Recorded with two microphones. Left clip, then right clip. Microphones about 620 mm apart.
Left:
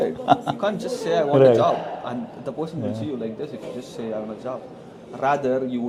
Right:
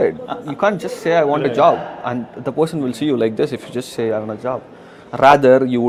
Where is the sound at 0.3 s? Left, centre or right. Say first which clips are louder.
Left 9 dB; left.